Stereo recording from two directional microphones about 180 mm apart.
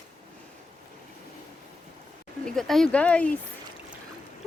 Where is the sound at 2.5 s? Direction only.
Centre (ahead or behind).